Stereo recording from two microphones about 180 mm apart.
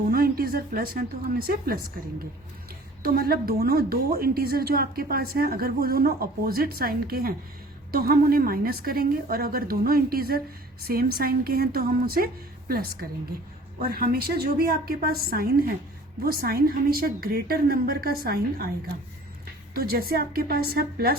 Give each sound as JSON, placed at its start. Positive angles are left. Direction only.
{"t": 0.1, "sound": "a woman's voice", "side_deg": -55}
{"t": 3.0, "sound": "a woman's voice", "side_deg": -55}
{"t": 19.7, "sound": "a woman's voice", "side_deg": -55}